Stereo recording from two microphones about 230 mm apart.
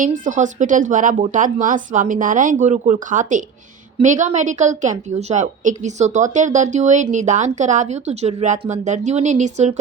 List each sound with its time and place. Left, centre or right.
0.0 s a woman's voice: right